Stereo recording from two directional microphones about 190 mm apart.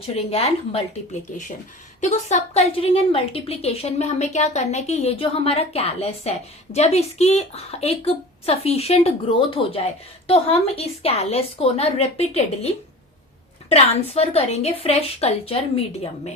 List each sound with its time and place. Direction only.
0.0 s a woman's voice: 30° left (ahead or behind)